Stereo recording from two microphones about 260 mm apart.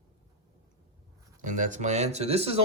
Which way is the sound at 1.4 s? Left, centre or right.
Right.